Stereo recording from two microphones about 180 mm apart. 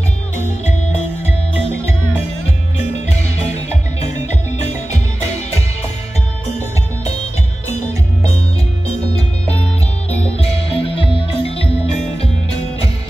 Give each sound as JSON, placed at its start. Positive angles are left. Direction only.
{"t": 1.2, "sound": "music", "side_deg": 35}
{"t": 7.7, "sound": "music", "side_deg": 35}
{"t": 10.0, "sound": "music", "side_deg": 35}